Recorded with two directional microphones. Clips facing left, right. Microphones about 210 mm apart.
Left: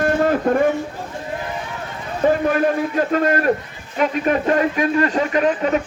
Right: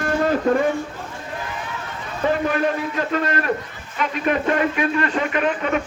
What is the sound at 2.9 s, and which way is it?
Speech, 40° left (ahead or behind).